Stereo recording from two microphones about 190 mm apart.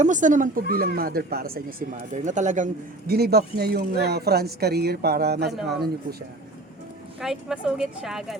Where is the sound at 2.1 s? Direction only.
40° right (ahead or behind).